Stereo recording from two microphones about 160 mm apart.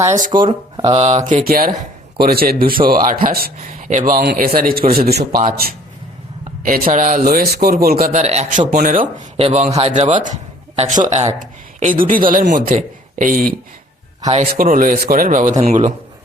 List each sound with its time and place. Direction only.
0.8 s speech: 35° right (ahead or behind); by 5.4 s 85° right
5.4 s speech: 65° right (ahead or behind)
8.1 s speech: 45° right (ahead or behind)
9.4 s speech: 40° right (ahead or behind)